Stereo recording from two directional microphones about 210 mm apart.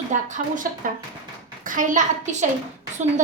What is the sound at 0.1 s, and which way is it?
A woman's voice, 40° right (ahead or behind).